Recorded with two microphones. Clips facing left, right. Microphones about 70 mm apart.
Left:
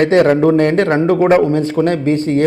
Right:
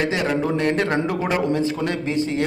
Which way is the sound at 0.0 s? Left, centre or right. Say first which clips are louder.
Left 11 dB; left.